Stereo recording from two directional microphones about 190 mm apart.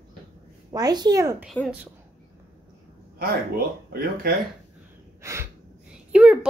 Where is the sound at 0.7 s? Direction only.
20° right (ahead or behind).